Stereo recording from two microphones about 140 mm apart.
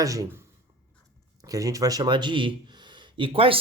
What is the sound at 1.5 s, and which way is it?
Speech, 25° right (ahead or behind).